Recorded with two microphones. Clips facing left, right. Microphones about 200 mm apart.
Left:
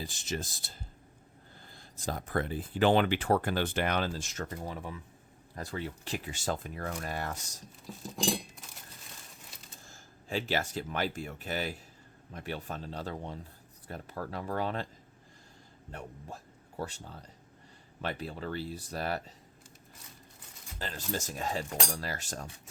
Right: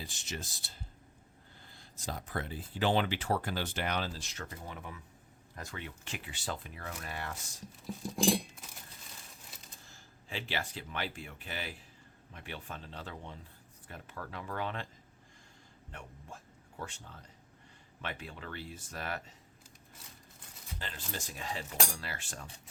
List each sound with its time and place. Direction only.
0.0 s speech: 40° left (ahead or behind)
1.6 s speech: 45° left (ahead or behind)
8.0 s cutlery: 10° right (ahead or behind)
9.8 s speech: 45° left (ahead or behind)
15.9 s speech: 40° left (ahead or behind)
20.7 s speech: 40° left (ahead or behind)